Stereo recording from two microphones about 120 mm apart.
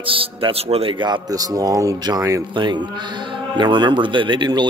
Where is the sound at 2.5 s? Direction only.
40° right (ahead or behind).